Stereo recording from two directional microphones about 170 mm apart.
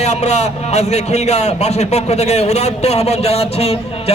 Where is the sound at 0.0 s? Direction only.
40° left (ahead or behind).